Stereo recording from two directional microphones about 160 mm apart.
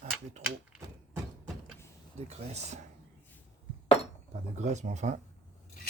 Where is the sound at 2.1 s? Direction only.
45° right (ahead or behind).